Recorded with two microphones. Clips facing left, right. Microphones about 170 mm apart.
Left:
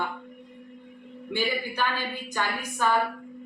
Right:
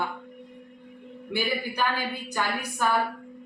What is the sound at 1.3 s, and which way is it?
Speech, 10° right (ahead or behind).